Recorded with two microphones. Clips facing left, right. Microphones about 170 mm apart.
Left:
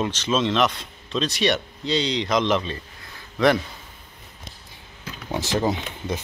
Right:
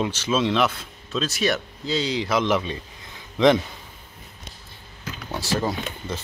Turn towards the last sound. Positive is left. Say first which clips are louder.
# left 2 dB
turn(degrees=15)  # may be behind; listen again after turning